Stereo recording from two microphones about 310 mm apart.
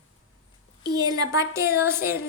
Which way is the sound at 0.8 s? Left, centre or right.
Centre.